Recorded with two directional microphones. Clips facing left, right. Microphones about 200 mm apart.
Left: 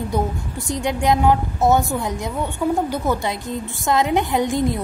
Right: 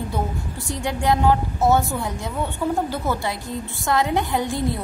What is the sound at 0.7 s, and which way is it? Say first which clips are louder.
A woman's voice: left 3 dB; 20° left (ahead or behind).